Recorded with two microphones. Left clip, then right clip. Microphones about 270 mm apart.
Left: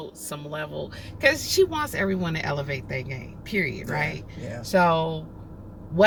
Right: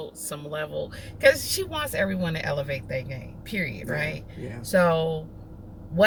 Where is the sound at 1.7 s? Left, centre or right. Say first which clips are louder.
Left 1 dB; centre.